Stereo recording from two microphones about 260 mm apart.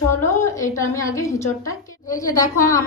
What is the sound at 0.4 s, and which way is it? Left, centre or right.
A woman's voice, centre.